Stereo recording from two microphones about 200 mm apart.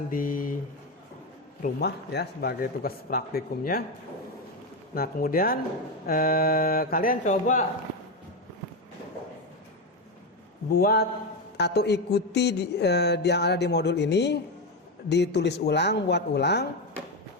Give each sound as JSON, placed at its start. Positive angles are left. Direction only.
{"t": 0.1, "sound": "speech", "side_deg": 45}
{"t": 1.6, "sound": "a man's voice", "side_deg": 50}
{"t": 4.9, "sound": "a man's voice", "side_deg": 45}
{"t": 10.7, "sound": "a man's voice", "side_deg": 45}